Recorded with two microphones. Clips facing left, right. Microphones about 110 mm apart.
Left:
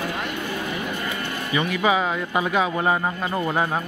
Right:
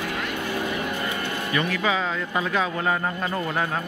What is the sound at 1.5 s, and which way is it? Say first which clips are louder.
Speech: left 4 dB; 15° left (ahead or behind).